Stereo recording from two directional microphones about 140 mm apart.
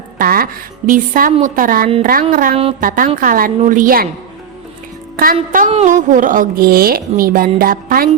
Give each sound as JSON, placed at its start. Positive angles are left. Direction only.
{"t": 0.2, "sound": "a woman's voice", "side_deg": -90}
{"t": 0.9, "sound": "a woman's voice", "side_deg": -80}
{"t": 5.1, "sound": "speech", "side_deg": -90}
{"t": 5.7, "sound": "speech", "side_deg": -65}